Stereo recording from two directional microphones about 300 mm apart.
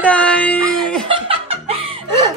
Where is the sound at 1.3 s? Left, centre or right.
Centre.